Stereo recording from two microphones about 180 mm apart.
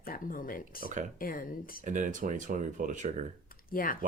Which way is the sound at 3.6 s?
50° left (ahead or behind).